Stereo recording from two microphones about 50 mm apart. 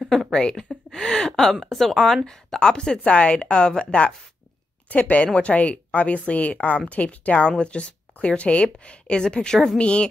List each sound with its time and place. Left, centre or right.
0.3 s speech: centre
4.8 s speech: left